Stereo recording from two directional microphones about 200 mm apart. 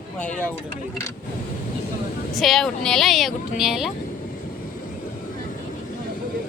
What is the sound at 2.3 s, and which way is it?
Speech, centre (ahead or behind).